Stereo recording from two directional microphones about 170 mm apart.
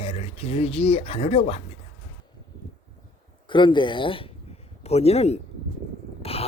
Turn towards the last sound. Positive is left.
turn(degrees=35)  # may be behind; listen again after turning